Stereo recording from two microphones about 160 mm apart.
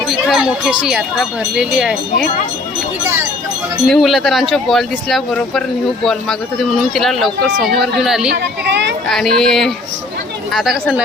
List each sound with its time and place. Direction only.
0.1 s speech: centre (ahead or behind)
3.8 s speech: centre (ahead or behind)
8.7 s a child's voice: 90° right
9.0 s speech: 5° left (ahead or behind)